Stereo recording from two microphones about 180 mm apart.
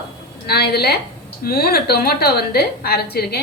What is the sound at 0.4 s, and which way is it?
A woman's voice, 60° left (ahead or behind).